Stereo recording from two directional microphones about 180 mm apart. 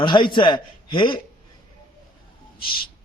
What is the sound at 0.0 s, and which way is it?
A man's voice, 25° left (ahead or behind).